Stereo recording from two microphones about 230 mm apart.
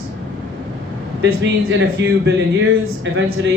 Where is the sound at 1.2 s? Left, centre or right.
Right.